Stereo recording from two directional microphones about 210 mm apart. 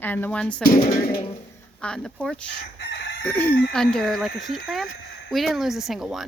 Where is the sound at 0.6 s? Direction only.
45° left (ahead or behind).